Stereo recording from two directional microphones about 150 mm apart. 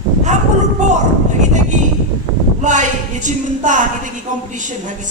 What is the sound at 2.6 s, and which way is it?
A woman's voice, 55° right (ahead or behind).